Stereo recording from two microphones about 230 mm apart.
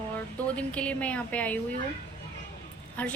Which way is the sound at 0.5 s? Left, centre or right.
Centre.